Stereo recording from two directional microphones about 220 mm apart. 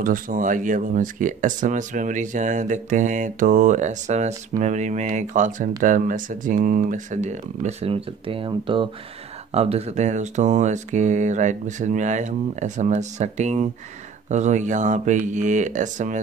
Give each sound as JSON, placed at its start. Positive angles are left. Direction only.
{"t": 0.0, "sound": "speech", "side_deg": -40}